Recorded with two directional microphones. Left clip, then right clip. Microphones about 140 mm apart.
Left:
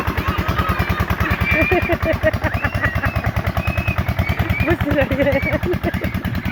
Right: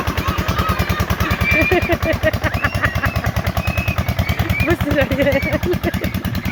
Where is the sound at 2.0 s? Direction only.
20° right (ahead or behind).